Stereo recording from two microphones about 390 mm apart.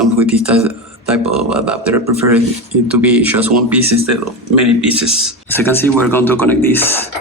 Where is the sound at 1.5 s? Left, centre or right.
Centre.